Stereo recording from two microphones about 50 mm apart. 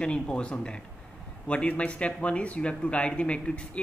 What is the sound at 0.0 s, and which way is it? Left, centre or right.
A man's voice, left.